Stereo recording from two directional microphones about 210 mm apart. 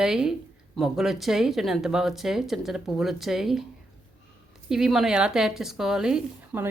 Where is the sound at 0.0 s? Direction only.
5° right (ahead or behind).